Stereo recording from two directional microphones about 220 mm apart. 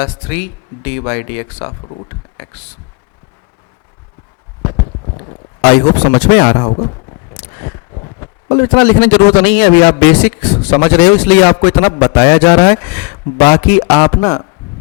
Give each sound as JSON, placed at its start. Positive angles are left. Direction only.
{"t": 0.0, "sound": "a man's voice", "side_deg": 10}
{"t": 1.8, "sound": "speech", "side_deg": 30}
{"t": 2.0, "sound": "a sound", "side_deg": 10}
{"t": 4.7, "sound": "clip-clop", "side_deg": 25}
{"t": 5.9, "sound": "a man's voice", "side_deg": 10}
{"t": 7.3, "sound": "a sound", "side_deg": 10}
{"t": 7.9, "sound": "a man's voice", "side_deg": 20}